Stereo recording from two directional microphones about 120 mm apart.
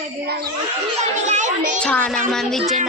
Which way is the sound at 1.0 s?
80° right.